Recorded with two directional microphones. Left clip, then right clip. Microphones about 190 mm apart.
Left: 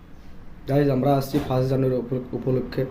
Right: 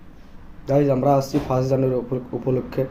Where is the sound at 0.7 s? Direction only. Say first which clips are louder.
Right 3 dB; 20° left (ahead or behind).